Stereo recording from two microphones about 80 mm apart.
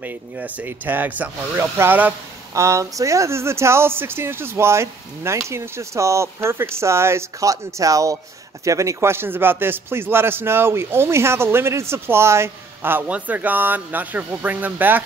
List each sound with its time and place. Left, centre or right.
0.0 s speech: right
1.5 s speech: right
2.5 s speech: right